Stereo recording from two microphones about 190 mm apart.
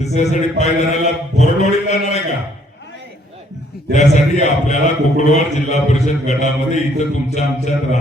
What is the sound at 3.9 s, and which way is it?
A man's voice, 40° left (ahead or behind).